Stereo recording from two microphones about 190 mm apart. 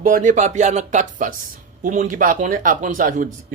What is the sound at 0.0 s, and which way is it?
Speech, 40° right (ahead or behind).